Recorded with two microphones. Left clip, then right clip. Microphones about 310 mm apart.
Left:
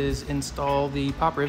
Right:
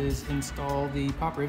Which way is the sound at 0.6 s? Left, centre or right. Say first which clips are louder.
Left 6 dB; centre.